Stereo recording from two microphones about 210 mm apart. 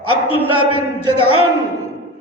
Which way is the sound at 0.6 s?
90° right.